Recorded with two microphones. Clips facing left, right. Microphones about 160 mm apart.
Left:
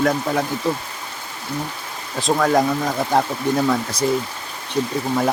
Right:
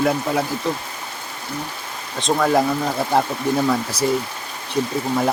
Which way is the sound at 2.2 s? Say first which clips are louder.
Even; centre (ahead or behind).